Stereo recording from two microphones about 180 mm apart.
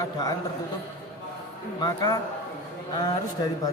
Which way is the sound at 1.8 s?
25° left (ahead or behind).